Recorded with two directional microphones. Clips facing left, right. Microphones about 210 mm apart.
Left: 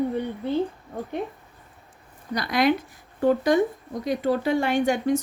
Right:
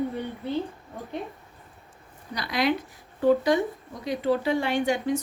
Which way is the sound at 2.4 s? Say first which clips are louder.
Left 4 dB; 50° left (ahead or behind).